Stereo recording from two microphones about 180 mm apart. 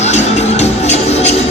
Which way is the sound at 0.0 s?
40° left (ahead or behind).